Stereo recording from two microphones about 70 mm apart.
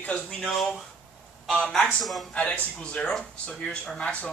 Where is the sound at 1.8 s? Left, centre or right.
Centre.